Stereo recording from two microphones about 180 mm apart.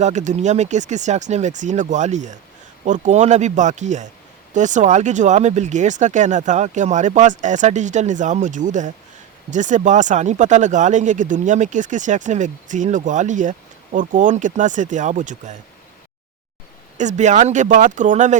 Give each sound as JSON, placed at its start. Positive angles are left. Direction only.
{"t": 0.0, "sound": "speech", "side_deg": -40}
{"t": 17.0, "sound": "speech", "side_deg": -40}